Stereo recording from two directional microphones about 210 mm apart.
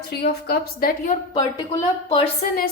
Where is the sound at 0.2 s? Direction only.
50° left (ahead or behind).